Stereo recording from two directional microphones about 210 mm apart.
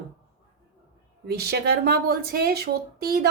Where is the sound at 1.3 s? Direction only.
50° right (ahead or behind).